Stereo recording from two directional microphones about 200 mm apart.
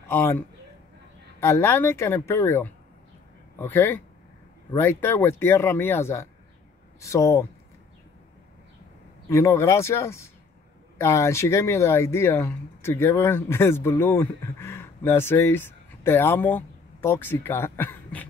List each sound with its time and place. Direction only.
0.1 s a man's voice: 10° left (ahead or behind)
1.4 s speech: 10° left (ahead or behind)
9.3 s speech: 15° left (ahead or behind)